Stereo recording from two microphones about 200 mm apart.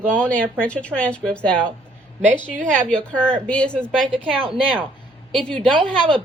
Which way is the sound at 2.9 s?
5° left (ahead or behind).